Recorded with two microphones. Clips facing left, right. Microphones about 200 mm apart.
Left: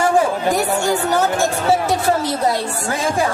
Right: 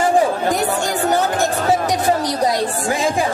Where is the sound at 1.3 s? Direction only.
15° right (ahead or behind).